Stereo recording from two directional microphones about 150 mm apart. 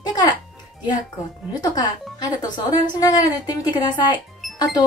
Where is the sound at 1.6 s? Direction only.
25° left (ahead or behind).